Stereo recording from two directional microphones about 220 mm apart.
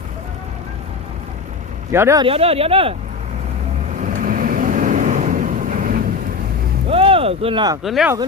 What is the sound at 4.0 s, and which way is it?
Vehicle, 35° right (ahead or behind).